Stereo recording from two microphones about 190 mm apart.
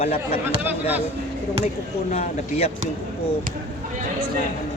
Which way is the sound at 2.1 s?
35° left (ahead or behind).